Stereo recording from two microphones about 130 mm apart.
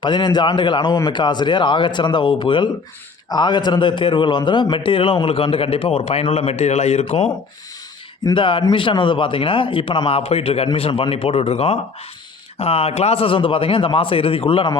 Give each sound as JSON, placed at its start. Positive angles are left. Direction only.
{"t": 0.0, "sound": "a man's voice", "side_deg": 35}
{"t": 8.2, "sound": "a man's voice", "side_deg": 35}